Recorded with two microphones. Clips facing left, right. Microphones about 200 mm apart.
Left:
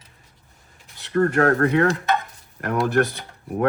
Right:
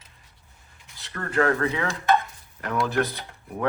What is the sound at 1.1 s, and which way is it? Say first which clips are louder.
Speech: left 6 dB; 55° left (ahead or behind).